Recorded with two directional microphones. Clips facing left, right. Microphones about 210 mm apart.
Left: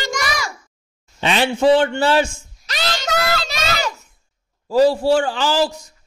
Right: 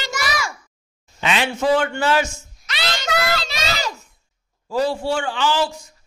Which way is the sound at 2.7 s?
45° left (ahead or behind).